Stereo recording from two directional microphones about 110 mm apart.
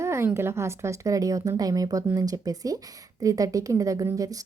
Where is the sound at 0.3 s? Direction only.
25° right (ahead or behind).